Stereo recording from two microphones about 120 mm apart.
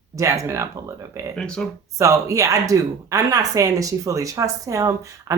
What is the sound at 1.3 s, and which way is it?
Speech, 5° left (ahead or behind).